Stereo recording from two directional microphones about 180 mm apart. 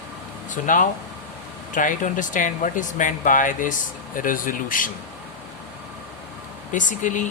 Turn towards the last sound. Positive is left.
turn(degrees=45)  # may be behind; listen again after turning